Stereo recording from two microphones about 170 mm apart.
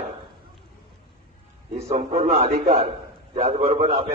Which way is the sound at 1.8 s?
40° right (ahead or behind).